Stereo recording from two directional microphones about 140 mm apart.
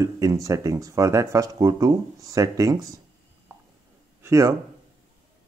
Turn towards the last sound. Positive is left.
turn(degrees=-20)  # may be behind; listen again after turning